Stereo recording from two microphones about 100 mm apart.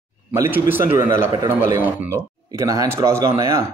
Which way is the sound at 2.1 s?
35° right (ahead or behind).